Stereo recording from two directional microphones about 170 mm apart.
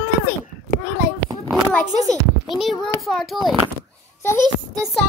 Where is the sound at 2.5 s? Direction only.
Centre (ahead or behind).